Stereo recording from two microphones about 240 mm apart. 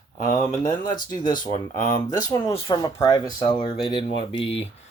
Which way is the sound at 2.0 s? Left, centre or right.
Centre.